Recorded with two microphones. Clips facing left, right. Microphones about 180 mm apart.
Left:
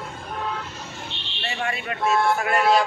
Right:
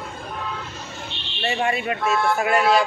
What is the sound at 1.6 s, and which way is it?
A man's voice, 15° right (ahead or behind).